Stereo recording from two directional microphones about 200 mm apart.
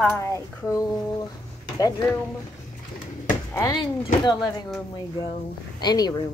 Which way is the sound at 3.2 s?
15° left (ahead or behind).